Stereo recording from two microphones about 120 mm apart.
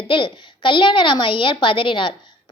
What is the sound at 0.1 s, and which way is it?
A child's voice, 40° left (ahead or behind).